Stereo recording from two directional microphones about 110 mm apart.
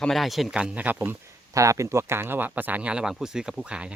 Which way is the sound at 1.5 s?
30° right (ahead or behind).